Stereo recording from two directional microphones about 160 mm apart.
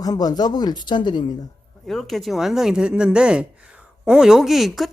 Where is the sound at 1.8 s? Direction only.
Centre (ahead or behind).